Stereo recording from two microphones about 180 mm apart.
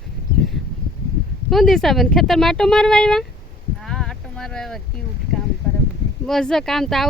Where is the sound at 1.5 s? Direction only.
Centre (ahead or behind).